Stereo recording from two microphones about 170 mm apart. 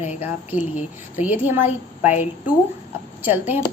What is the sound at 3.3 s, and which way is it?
Speech, 10° right (ahead or behind).